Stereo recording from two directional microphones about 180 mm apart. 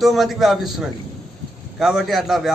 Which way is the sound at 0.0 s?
Centre (ahead or behind).